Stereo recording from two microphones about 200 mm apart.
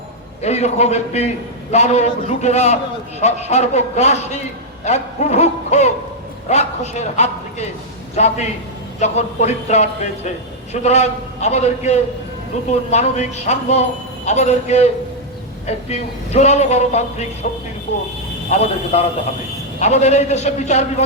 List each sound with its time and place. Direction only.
0.4 s a man's voice: 35° left (ahead or behind)
18.6 s a man's voice: 30° left (ahead or behind)